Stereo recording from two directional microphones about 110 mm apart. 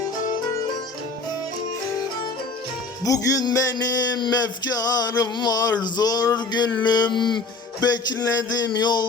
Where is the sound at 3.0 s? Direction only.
30° left (ahead or behind).